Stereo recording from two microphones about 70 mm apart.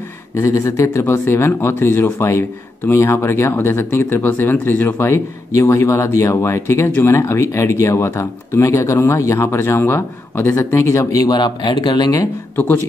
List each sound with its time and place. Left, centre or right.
0.7 s speech: left
5.1 s speech: left